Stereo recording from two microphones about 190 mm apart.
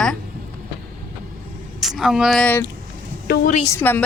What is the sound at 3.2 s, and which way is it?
Speech, 55° left (ahead or behind).